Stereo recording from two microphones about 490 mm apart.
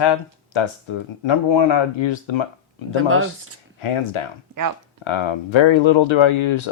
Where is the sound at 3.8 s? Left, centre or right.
Left.